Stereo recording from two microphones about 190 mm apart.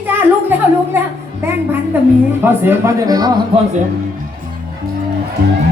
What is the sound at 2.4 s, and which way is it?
Speech, 10° right (ahead or behind).